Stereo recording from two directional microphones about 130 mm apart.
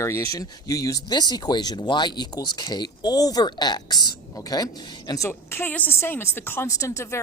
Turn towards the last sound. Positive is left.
turn(degrees=20)  # may be behind; listen again after turning